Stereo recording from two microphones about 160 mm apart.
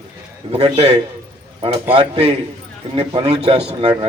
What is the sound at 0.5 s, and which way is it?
A man's voice, 40° right (ahead or behind).